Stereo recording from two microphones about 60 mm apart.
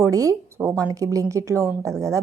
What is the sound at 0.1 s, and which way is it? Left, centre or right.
A woman's voice, right.